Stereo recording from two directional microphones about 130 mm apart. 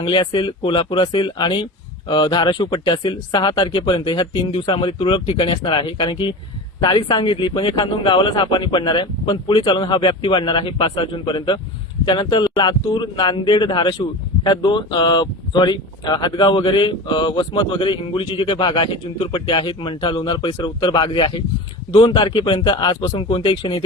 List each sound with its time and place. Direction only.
0.0 s speech: 40° left (ahead or behind)